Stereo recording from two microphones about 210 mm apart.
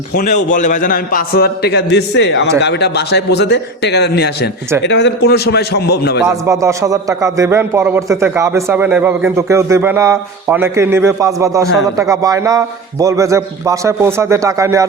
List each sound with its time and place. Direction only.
0.1 s a man's voice: 40° left (ahead or behind)
6.2 s a man's voice: 15° right (ahead or behind)